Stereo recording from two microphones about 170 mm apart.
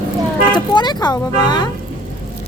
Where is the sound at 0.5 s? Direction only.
25° left (ahead or behind).